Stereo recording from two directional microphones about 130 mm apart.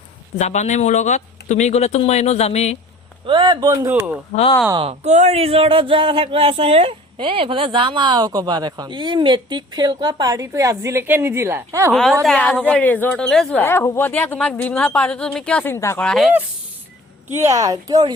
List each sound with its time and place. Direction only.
0.3 s speech: 60° left (ahead or behind)
3.2 s a man's voice: 40° right (ahead or behind)
3.7 s speech: 20° right (ahead or behind)
4.3 s speech: 75° left (ahead or behind)
4.8 s a man's voice: 55° right (ahead or behind); by 11.9 s 20° right (ahead or behind)
12.2 s a woman's voice: 5° left (ahead or behind)
13.6 s a woman's voice: 20° left (ahead or behind)
15.7 s speech: 20° left (ahead or behind)
16.0 s speech: 5° left (ahead or behind)
17.2 s speech: 20° right (ahead or behind)